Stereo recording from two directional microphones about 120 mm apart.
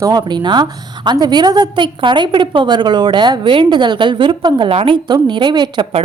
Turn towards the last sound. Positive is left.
turn(degrees=-40)  # may be behind; listen again after turning